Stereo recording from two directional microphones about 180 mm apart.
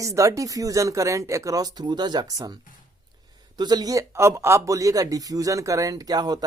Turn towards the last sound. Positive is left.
turn(degrees=-20)  # may be behind; listen again after turning